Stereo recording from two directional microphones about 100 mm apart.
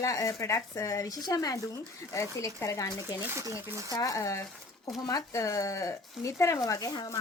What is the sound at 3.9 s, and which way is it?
Speech, 35° left (ahead or behind).